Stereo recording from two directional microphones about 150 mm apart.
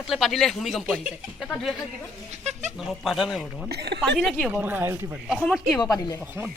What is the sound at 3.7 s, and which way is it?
Speech, 90° right.